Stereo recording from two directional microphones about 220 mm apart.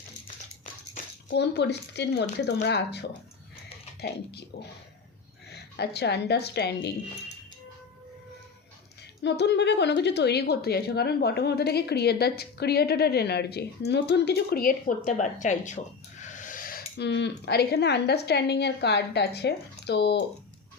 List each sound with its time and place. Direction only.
1.3 s speech: 50° left (ahead or behind)
5.5 s speech: 50° left (ahead or behind)
9.2 s speech: 50° left (ahead or behind)